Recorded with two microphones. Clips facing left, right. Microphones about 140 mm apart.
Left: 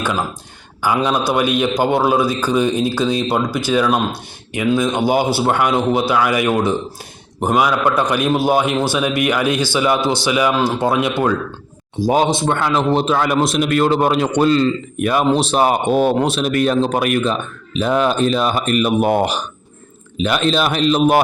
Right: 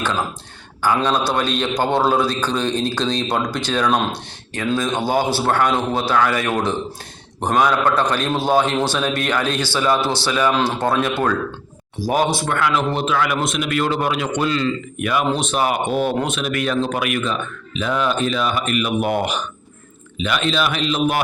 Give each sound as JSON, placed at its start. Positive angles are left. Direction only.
{"t": 0.8, "sound": "speech", "side_deg": 10}